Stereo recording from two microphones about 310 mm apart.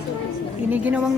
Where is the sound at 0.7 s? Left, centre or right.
Centre.